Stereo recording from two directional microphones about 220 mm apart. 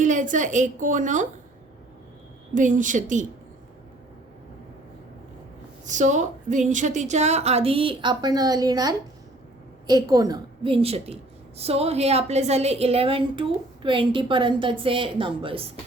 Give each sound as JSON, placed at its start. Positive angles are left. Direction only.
{"t": 0.0, "sound": "a woman's voice", "side_deg": -35}
{"t": 2.6, "sound": "a woman's voice", "side_deg": -35}
{"t": 5.8, "sound": "a woman's voice", "side_deg": -35}